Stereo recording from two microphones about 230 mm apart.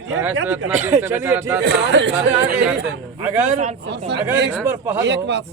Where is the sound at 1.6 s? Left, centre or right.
Right.